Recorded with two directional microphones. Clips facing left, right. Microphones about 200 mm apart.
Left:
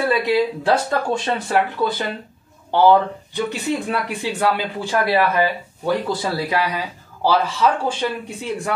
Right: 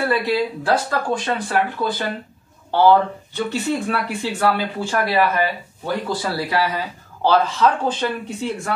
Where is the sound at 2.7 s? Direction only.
15° left (ahead or behind).